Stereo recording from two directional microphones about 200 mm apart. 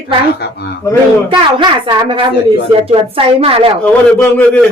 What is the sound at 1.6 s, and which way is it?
A woman's voice, 25° right (ahead or behind).